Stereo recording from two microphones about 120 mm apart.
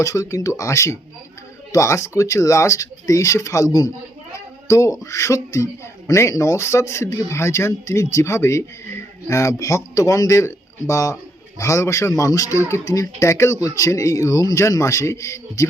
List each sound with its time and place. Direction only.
0.0 s speech: 25° left (ahead or behind)